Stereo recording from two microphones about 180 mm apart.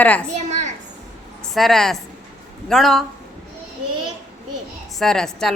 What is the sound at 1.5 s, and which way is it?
A woman's voice, centre (ahead or behind).